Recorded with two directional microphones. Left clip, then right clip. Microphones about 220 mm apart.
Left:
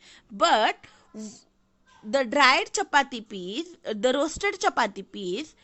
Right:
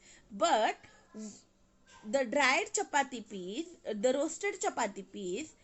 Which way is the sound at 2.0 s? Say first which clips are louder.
Left 9 dB; 50° left (ahead or behind).